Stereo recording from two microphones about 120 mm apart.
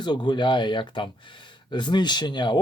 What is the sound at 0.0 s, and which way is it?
Speech, 40° left (ahead or behind).